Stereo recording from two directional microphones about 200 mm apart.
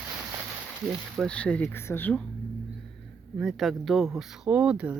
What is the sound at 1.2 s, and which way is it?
Speech, 5° left (ahead or behind).